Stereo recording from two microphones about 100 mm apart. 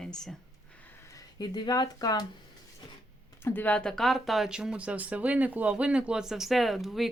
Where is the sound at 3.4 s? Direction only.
20° left (ahead or behind).